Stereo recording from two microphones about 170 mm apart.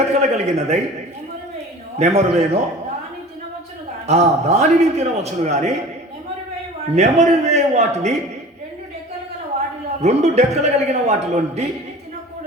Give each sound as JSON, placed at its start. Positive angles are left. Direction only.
{"t": 0.1, "sound": "a man's voice", "side_deg": -40}
{"t": 2.0, "sound": "a man's voice", "side_deg": -40}
{"t": 4.0, "sound": "a man's voice", "side_deg": -40}
{"t": 6.9, "sound": "a man's voice", "side_deg": -40}
{"t": 10.0, "sound": "a man's voice", "side_deg": -40}